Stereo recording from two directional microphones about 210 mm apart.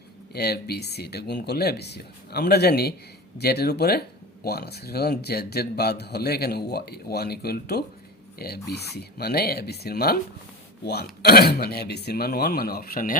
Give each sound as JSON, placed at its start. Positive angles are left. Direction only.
{"t": 0.3, "sound": "speech", "side_deg": 50}